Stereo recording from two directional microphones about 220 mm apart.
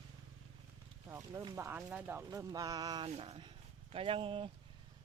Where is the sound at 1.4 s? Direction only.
15° right (ahead or behind).